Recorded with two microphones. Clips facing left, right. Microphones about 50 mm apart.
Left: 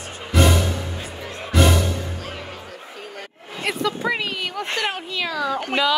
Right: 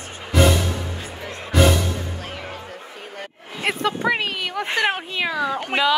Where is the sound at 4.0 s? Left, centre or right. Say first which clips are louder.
Right 2 dB; right.